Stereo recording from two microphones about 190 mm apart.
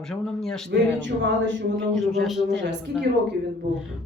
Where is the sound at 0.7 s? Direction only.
75° right (ahead or behind).